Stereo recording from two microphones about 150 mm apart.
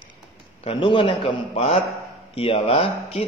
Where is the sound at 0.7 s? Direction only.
40° left (ahead or behind).